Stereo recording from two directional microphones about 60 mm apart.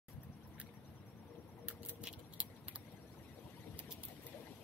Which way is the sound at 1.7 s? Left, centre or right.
Right.